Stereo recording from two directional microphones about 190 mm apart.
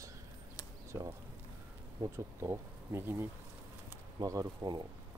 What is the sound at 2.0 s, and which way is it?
Speech, 15° right (ahead or behind).